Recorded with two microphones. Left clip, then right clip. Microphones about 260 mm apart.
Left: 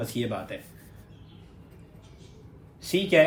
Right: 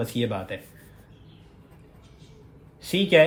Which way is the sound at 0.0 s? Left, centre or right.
Right.